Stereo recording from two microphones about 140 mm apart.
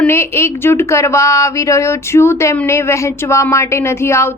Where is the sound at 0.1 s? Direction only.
20° left (ahead or behind).